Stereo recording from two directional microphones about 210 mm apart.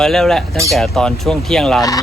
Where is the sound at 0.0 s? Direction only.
Centre (ahead or behind).